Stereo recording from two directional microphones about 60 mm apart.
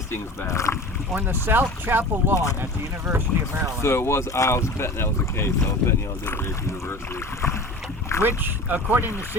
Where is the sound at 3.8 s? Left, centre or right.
Left.